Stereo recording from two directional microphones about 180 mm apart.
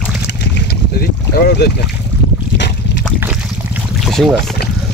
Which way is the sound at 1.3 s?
60° left (ahead or behind).